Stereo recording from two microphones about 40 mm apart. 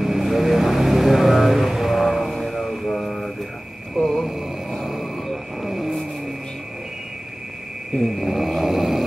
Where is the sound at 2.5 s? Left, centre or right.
Centre.